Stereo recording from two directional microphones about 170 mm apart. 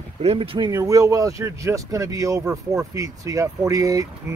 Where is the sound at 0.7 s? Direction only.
20° right (ahead or behind).